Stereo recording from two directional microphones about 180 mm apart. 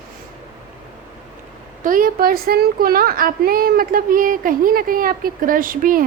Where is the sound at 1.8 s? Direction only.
50° right (ahead or behind).